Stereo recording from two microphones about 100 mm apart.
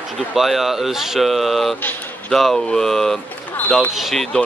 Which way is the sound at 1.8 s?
15° left (ahead or behind).